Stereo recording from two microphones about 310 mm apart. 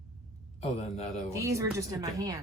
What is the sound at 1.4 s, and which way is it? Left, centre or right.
Speech, centre.